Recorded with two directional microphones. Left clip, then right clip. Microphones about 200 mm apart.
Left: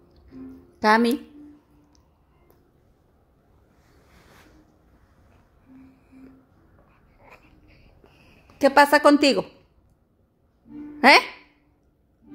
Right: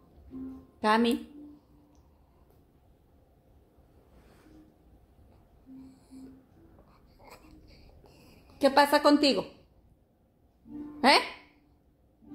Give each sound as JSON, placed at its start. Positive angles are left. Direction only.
{"t": 0.7, "sound": "a woman's voice", "side_deg": 30}
{"t": 8.5, "sound": "a woman's voice", "side_deg": 30}
{"t": 11.0, "sound": "speech", "side_deg": 35}